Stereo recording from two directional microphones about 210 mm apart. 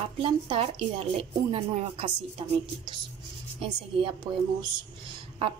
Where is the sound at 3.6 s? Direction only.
25° right (ahead or behind).